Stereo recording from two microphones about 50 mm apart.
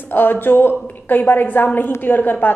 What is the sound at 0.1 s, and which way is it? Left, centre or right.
A woman's voice, left.